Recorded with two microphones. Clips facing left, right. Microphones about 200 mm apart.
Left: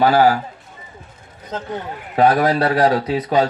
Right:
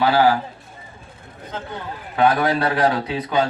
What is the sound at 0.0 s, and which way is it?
Speech, 45° left (ahead or behind).